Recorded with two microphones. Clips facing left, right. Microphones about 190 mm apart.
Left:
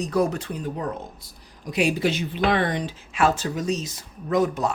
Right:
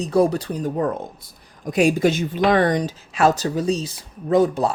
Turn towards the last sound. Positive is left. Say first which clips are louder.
# right 5 dB
turn(degrees=-30)  # may be behind; listen again after turning